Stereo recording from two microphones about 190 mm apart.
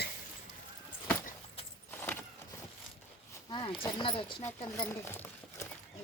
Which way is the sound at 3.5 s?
25° left (ahead or behind).